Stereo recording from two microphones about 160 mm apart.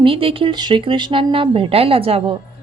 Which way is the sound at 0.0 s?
35° right (ahead or behind).